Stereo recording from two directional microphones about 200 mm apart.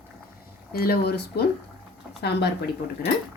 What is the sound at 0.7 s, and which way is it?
Speech, 50° left (ahead or behind).